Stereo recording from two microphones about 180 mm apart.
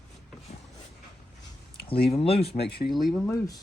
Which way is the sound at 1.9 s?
30° left (ahead or behind).